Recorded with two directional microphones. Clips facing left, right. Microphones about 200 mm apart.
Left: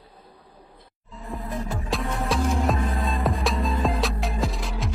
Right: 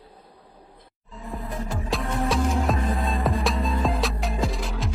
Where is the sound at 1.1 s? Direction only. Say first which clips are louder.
Left 1 dB; centre (ahead or behind).